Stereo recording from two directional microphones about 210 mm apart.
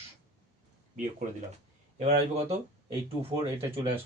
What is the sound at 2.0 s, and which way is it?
Speech, 30° right (ahead or behind).